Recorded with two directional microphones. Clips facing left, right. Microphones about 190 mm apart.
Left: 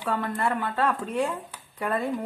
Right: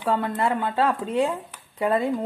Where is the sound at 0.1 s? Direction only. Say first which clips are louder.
Right 3 dB; 25° right (ahead or behind).